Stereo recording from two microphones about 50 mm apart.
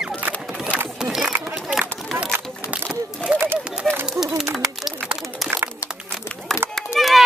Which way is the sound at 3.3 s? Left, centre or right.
Right.